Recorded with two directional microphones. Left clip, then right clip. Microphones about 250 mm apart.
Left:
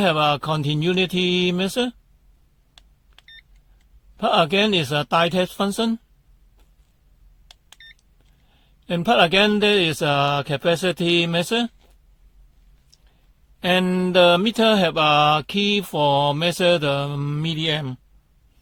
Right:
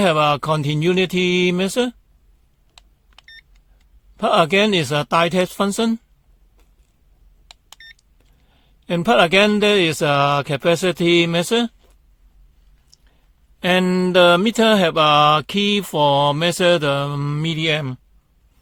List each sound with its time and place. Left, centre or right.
0.0 s mantra: right
4.2 s mantra: right
8.4 s mantra: right
13.6 s mantra: right